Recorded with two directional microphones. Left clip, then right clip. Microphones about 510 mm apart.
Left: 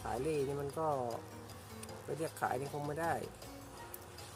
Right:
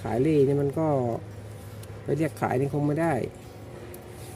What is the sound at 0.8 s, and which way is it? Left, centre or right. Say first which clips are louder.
Speech: right 10 dB; left.